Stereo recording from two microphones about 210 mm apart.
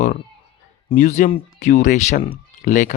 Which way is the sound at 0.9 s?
35° left (ahead or behind).